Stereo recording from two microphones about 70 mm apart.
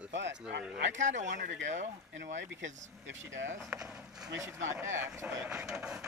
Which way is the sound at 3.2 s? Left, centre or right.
Right.